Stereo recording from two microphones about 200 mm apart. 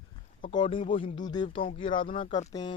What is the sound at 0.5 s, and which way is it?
Speech, 25° left (ahead or behind).